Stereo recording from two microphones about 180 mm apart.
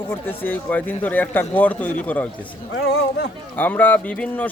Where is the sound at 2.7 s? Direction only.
90° left.